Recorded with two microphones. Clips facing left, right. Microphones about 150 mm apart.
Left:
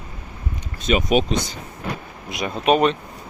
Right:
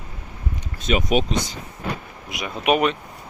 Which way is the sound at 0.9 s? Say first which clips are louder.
Left 2 dB; 25° left (ahead or behind).